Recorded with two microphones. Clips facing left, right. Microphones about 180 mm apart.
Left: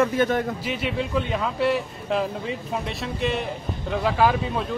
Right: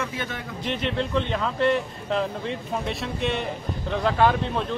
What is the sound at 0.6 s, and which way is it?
A man's voice, 5° left (ahead or behind).